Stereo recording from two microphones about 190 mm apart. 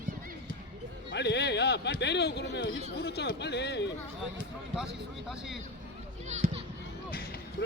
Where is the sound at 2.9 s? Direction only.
60° left (ahead or behind).